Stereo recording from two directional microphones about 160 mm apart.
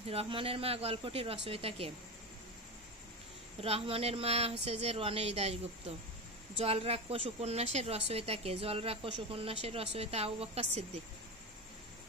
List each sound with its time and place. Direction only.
0.0 s a woman's voice: 40° right (ahead or behind)
3.6 s a woman's voice: 35° right (ahead or behind)